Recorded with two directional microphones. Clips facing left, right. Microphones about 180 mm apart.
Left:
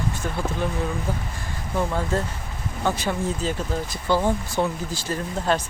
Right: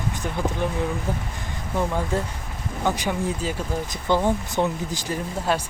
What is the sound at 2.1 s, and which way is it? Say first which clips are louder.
Speech: even; 15° right (ahead or behind).